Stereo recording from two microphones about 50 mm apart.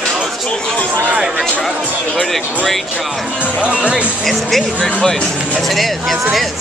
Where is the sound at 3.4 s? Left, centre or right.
Right.